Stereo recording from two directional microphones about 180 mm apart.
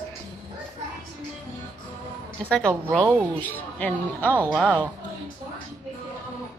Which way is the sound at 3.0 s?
10° right (ahead or behind).